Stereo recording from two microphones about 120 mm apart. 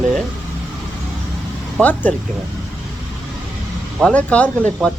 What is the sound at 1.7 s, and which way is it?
Speech, 15° left (ahead or behind).